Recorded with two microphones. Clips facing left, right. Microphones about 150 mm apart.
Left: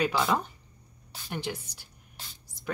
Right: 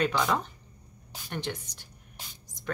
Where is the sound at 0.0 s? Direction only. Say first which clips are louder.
Even; 10° left (ahead or behind).